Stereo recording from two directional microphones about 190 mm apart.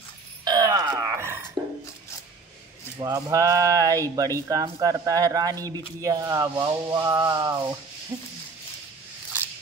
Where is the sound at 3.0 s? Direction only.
15° right (ahead or behind).